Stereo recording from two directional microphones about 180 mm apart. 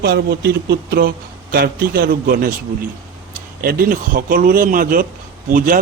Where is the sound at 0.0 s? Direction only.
60° right (ahead or behind).